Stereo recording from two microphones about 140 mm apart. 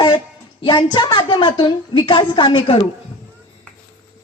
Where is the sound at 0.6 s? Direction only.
35° left (ahead or behind).